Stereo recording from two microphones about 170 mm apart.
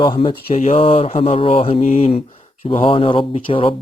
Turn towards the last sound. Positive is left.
turn(degrees=30)  # may be behind; listen again after turning